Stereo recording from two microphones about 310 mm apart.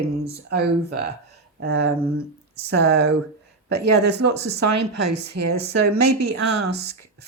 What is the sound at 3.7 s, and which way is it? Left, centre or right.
Speech, right.